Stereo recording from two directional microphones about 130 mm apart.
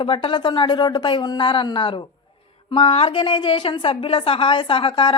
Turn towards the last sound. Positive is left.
turn(degrees=40)  # may be behind; listen again after turning